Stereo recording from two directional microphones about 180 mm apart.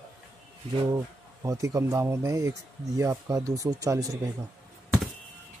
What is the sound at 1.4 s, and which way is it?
Speech, 20° right (ahead or behind).